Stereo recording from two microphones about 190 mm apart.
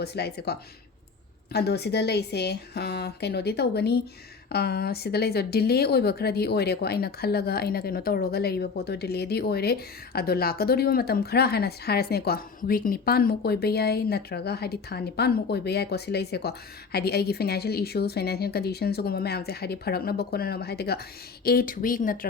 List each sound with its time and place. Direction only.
0.0 s speech: 60° left (ahead or behind)
1.5 s speech: 60° left (ahead or behind)